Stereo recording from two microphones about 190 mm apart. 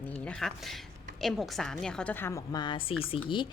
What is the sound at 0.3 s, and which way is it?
A woman's voice, centre (ahead or behind).